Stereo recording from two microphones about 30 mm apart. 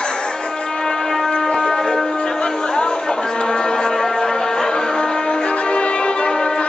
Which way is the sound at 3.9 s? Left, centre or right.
Centre.